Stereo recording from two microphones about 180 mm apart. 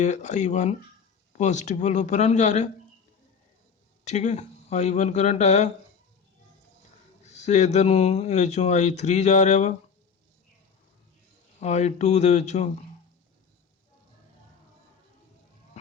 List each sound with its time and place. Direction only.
0.0 s speech: 40° left (ahead or behind)
4.0 s speech: 40° left (ahead or behind)
7.3 s speech: 40° left (ahead or behind)
11.6 s speech: 40° left (ahead or behind)